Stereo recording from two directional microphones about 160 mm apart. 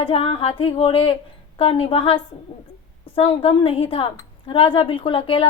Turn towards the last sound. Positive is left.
turn(degrees=35)  # may be behind; listen again after turning